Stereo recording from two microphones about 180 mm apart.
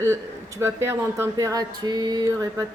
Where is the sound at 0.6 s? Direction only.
15° right (ahead or behind).